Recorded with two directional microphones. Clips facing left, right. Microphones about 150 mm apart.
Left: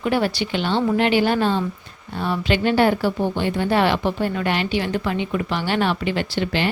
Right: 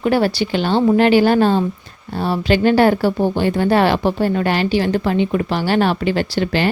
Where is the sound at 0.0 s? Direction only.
40° right (ahead or behind).